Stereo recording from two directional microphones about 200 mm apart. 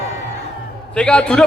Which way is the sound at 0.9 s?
5° left (ahead or behind).